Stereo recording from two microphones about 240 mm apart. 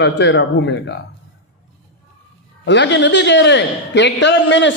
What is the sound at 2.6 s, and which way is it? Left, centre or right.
A man's voice, left.